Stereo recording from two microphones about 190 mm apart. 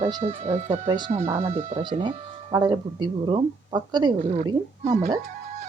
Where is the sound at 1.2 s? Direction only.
15° right (ahead or behind).